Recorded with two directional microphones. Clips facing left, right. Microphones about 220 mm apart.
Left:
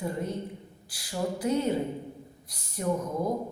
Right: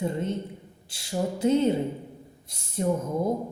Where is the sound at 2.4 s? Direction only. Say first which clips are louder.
Right 7 dB; 25° right (ahead or behind).